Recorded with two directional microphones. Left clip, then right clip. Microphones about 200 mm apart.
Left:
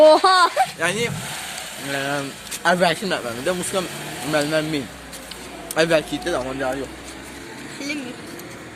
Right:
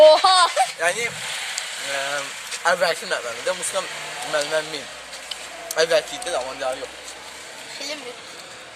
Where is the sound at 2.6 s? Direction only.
40° left (ahead or behind).